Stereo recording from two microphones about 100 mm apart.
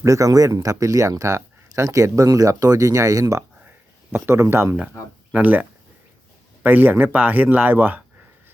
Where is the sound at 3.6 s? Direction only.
20° right (ahead or behind).